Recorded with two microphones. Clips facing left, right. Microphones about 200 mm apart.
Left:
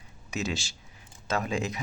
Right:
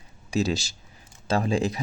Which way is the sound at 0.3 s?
35° right (ahead or behind).